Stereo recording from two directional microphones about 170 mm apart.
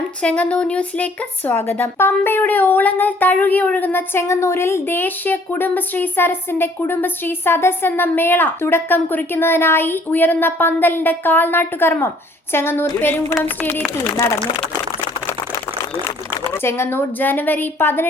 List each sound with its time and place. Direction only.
0.2 s speech: 5° left (ahead or behind)
16.0 s a woman's voice: 15° left (ahead or behind)